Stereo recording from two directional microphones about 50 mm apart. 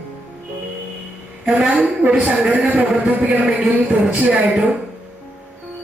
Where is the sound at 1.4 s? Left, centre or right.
Centre.